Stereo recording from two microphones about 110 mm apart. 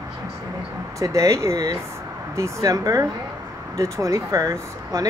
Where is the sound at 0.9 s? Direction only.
30° right (ahead or behind).